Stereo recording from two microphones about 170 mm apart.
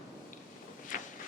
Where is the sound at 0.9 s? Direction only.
55° left (ahead or behind).